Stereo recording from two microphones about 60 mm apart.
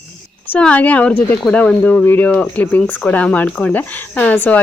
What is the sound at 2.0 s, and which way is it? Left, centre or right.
Speech, left.